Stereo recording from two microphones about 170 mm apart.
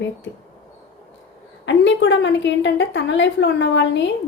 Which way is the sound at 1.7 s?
90° left.